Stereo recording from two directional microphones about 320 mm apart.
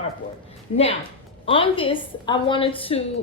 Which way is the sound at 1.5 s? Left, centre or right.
Centre.